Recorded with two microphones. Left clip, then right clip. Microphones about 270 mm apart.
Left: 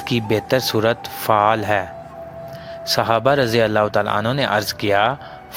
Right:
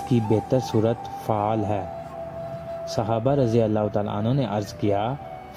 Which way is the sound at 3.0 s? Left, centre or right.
Left.